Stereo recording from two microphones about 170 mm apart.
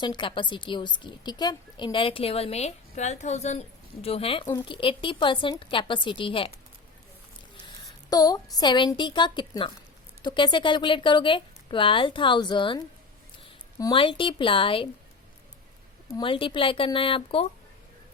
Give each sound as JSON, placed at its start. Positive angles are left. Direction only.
{"t": 0.0, "sound": "a woman's voice", "side_deg": 25}
{"t": 8.1, "sound": "a woman's voice", "side_deg": 20}
{"t": 16.1, "sound": "a woman's voice", "side_deg": 30}